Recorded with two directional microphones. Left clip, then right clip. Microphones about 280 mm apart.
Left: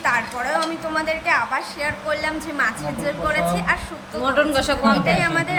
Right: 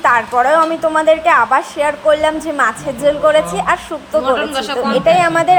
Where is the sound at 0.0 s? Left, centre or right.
Right.